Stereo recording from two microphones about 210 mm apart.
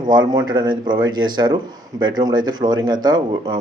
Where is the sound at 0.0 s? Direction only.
20° right (ahead or behind).